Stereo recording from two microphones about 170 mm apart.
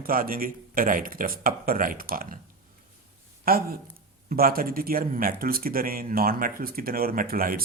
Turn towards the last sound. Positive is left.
turn(degrees=-60)  # may be behind; listen again after turning